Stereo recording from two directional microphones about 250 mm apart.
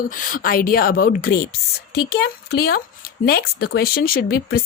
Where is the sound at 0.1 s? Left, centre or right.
Left.